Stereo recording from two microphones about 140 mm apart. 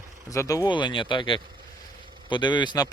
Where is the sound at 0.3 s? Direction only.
25° left (ahead or behind).